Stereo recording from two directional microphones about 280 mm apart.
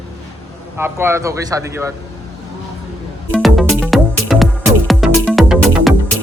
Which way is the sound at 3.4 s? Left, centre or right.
Centre.